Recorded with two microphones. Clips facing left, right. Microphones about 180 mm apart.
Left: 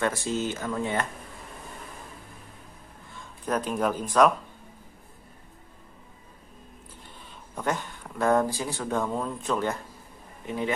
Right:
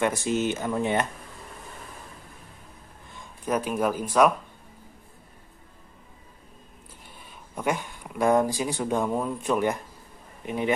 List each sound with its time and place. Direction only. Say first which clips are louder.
0.0 s speech: right 3 dB; 20° right (ahead or behind)
3.4 s speech: right 1 dB; 10° right (ahead or behind)
7.2 s speech: right 2 dB; 10° right (ahead or behind)